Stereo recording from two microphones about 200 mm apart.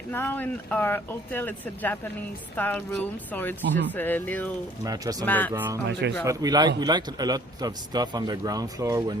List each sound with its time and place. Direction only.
0.1 s speech: 10° left (ahead or behind)
4.8 s speech: 20° right (ahead or behind)
5.2 s speech: 10° left (ahead or behind)
5.5 s speech: 10° right (ahead or behind)
5.9 s speech: 60° right (ahead or behind)
6.2 s a man's voice: 20° right (ahead or behind)